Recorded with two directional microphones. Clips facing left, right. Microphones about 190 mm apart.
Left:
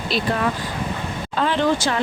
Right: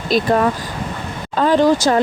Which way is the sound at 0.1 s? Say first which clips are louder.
Right 7 dB; 45° right (ahead or behind).